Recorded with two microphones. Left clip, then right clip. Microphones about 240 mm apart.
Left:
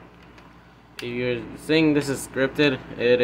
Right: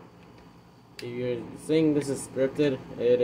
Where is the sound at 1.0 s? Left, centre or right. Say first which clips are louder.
Left 5 dB; centre.